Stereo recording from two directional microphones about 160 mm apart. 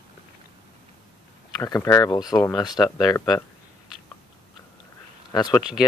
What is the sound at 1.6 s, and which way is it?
Speech, 20° left (ahead or behind).